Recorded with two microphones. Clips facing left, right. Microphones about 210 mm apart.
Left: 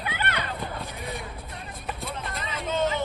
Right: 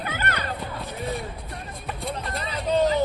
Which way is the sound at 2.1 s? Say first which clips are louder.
Right 3 dB; 35° right (ahead or behind).